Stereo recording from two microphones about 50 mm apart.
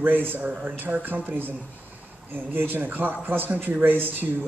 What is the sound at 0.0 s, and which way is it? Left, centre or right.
A man's voice, right.